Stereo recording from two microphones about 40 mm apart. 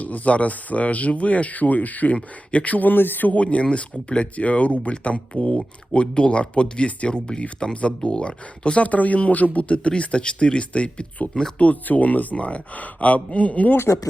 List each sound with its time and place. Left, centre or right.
0.0 s speech: left
2.1 s speech: left
3.4 s speech: left
7.1 s speech: left
8.9 s speech: left